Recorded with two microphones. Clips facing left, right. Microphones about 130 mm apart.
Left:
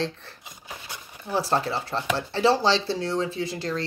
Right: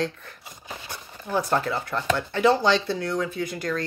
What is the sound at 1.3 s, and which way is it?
Speech, 30° left (ahead or behind).